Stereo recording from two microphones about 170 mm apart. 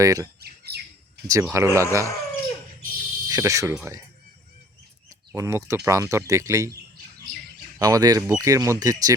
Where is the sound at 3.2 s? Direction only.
20° right (ahead or behind).